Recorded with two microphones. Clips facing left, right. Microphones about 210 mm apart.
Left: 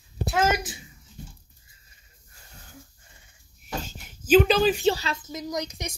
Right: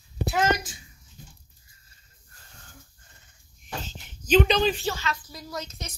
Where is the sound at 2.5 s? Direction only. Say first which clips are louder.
Left 5 dB; 10° left (ahead or behind).